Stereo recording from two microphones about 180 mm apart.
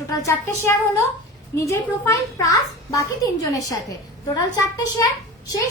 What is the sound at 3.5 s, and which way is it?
Speech, 20° left (ahead or behind).